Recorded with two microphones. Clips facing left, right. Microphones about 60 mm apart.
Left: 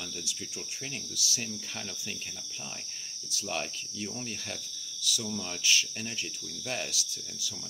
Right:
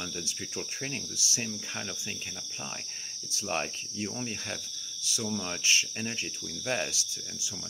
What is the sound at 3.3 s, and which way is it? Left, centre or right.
Cricket, right.